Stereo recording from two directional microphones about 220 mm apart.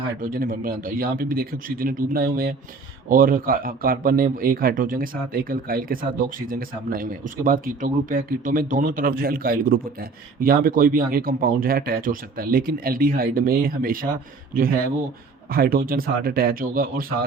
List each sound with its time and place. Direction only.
0.2 s a man's voice: 40° right (ahead or behind)
15.5 s a man's voice: 40° right (ahead or behind)